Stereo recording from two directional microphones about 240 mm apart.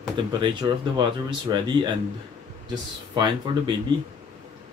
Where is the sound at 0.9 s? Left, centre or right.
Centre.